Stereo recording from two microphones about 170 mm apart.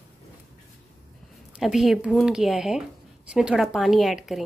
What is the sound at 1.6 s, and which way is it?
A woman's voice, centre (ahead or behind).